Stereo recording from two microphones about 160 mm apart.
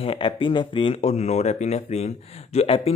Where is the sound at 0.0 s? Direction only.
35° left (ahead or behind).